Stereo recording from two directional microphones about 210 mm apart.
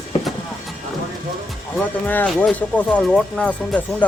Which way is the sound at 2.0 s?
10° left (ahead or behind).